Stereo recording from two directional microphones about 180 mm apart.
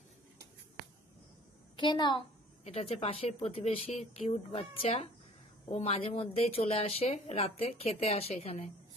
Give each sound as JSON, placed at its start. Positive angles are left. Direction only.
{"t": 1.8, "sound": "a woman's voice", "side_deg": 25}